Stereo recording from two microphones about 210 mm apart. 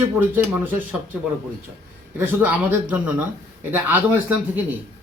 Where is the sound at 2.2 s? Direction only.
10° right (ahead or behind).